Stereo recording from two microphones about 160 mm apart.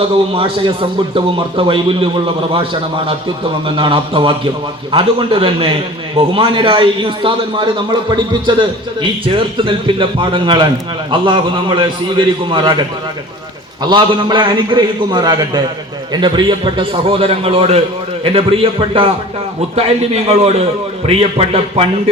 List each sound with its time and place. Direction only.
0.3 s a man's voice: 35° right (ahead or behind)
3.8 s a man's voice: 35° right (ahead or behind)
13.8 s a man's voice: 30° right (ahead or behind)